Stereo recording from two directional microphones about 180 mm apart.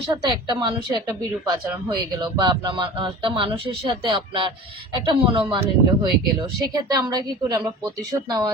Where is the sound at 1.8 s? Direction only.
20° right (ahead or behind).